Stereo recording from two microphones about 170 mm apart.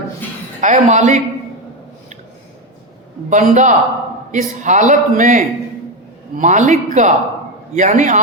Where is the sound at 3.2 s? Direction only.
50° right (ahead or behind).